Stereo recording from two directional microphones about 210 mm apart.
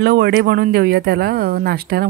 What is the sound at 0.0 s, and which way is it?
Speech, 50° right (ahead or behind).